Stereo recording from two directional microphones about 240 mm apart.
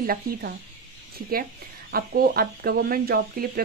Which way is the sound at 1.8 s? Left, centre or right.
Right.